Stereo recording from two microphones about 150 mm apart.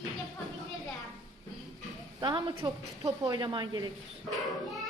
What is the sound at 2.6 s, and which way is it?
A woman's voice, 25° right (ahead or behind).